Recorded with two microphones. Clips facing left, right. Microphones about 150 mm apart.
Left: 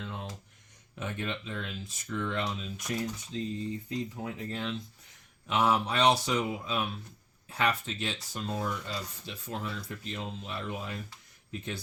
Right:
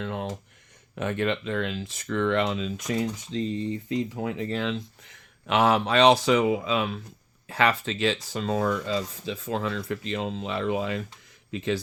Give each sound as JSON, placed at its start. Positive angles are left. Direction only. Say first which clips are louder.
{"t": 0.0, "sound": "speech", "louder": "right 9 dB", "side_deg": -65}